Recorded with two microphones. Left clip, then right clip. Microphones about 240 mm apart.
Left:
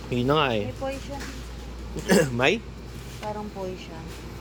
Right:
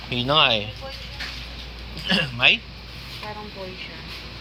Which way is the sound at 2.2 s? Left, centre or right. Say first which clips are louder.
Right 3 dB; left.